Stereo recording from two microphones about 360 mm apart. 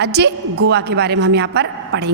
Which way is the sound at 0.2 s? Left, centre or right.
Right.